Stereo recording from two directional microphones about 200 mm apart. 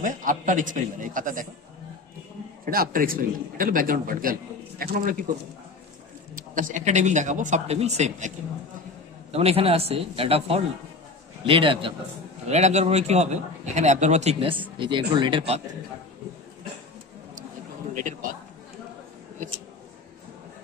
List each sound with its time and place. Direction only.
0.0 s a man's voice: 40° right (ahead or behind)
2.6 s a man's voice: 45° right (ahead or behind)
6.3 s a man's voice: 40° right (ahead or behind)
9.3 s a man's voice: 30° right (ahead or behind)
14.8 s a man's voice: 25° right (ahead or behind)
17.9 s a man's voice: 40° right (ahead or behind)